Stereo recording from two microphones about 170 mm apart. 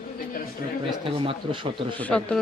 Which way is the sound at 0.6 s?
60° left (ahead or behind).